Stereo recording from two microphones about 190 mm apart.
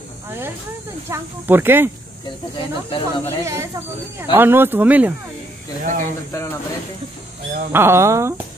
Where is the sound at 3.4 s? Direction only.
15° right (ahead or behind).